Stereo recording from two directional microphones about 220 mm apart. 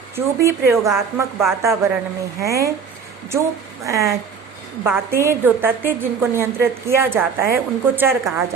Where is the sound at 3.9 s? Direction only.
15° right (ahead or behind).